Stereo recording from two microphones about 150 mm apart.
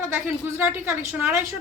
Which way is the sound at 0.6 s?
10° right (ahead or behind).